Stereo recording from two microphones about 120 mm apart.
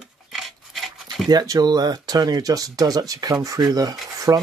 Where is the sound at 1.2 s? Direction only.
30° right (ahead or behind).